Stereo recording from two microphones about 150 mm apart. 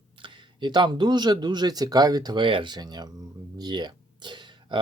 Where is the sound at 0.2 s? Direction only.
30° right (ahead or behind).